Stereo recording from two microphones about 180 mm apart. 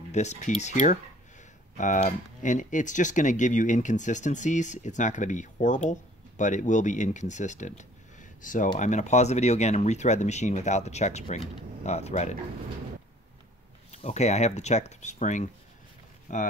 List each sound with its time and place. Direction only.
0.1 s speech: 40° left (ahead or behind)
13.9 s speech: 40° left (ahead or behind)